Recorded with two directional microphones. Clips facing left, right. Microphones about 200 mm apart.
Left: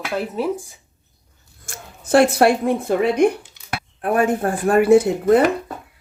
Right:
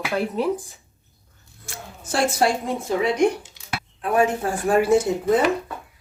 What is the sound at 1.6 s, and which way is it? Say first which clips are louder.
Speech: left 1 dB; 55° left (ahead or behind).